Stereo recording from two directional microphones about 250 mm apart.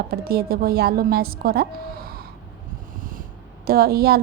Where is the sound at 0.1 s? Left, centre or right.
Right.